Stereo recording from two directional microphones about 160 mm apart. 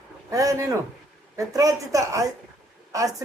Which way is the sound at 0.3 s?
20° right (ahead or behind).